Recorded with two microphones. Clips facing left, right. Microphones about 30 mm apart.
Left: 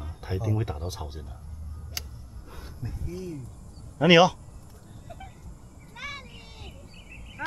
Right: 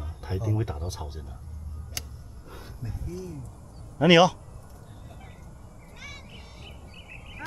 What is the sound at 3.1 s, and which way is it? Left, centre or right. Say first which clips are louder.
Speech: left 2 dB; centre.